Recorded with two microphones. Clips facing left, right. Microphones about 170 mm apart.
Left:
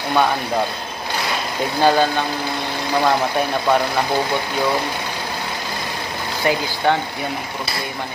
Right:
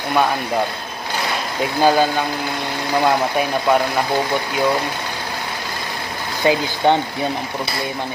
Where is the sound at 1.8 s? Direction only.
10° right (ahead or behind).